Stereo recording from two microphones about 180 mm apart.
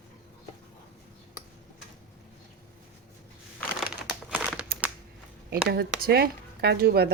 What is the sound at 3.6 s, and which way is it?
Crumpling, centre (ahead or behind).